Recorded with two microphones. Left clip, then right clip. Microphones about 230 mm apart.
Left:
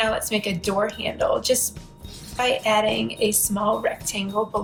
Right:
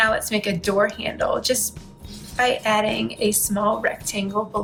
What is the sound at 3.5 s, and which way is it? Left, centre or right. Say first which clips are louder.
Speech: right 1 dB; right.